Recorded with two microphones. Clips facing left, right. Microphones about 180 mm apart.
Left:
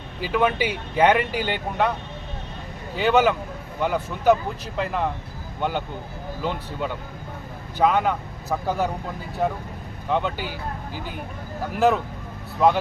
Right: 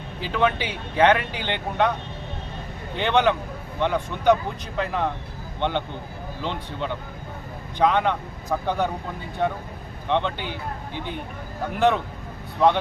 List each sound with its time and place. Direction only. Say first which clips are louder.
0.2 s speech: left 2 dB; 10° left (ahead or behind)
2.9 s speech: left 2 dB; 5° left (ahead or behind)